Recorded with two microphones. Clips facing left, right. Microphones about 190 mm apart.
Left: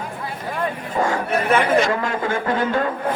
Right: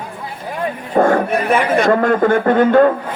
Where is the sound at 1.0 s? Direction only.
55° right (ahead or behind).